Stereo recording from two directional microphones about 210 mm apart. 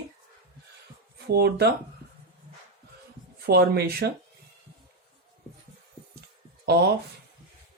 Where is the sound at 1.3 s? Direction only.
50° right (ahead or behind).